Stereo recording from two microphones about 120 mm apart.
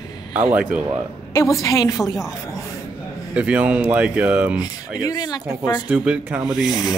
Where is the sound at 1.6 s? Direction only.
30° left (ahead or behind).